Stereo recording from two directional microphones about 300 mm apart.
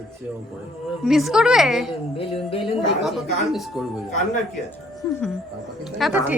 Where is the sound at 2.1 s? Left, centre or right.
Centre.